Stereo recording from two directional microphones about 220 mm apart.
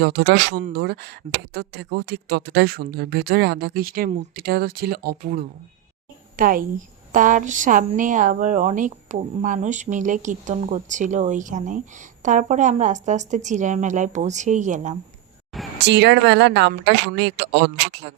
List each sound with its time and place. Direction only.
0.0 s a woman's voice: 45° right (ahead or behind)
15.8 s speech: 50° right (ahead or behind)